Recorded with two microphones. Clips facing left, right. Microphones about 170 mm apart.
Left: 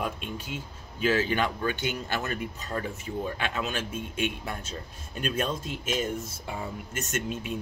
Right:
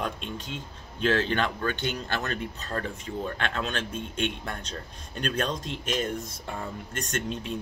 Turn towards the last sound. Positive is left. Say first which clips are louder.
# even
turn(degrees=5)  # may be behind; listen again after turning